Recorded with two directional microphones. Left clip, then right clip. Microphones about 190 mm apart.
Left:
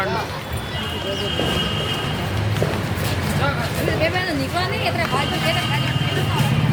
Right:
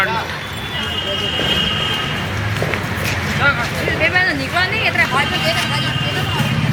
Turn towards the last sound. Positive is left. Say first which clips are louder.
# right 5 dB
turn(degrees=20)  # may be behind; listen again after turning